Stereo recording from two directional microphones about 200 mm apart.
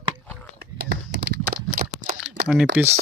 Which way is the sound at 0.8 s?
60° right (ahead or behind).